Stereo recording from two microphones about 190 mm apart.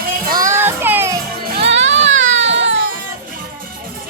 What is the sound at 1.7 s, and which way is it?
Children playing, 75° right (ahead or behind).